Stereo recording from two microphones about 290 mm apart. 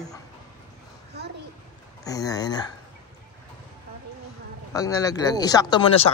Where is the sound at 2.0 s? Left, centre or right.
Centre.